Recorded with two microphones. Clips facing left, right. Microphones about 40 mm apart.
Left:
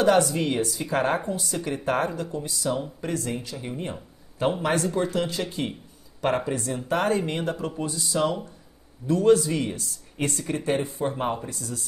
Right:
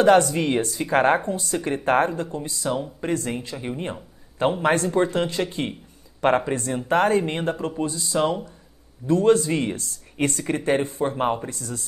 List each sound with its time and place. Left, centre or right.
0.0 s speech: right
9.0 s speech: right
11.4 s speech: right